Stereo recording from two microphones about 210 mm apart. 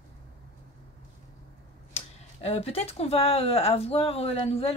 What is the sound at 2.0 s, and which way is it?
Speech, 30° left (ahead or behind).